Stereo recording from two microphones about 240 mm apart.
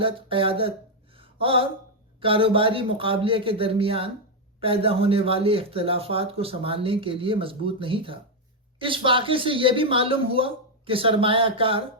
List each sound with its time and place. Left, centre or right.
0.0 s a man's voice: right
1.1 s a sound: right
2.2 s a man's voice: right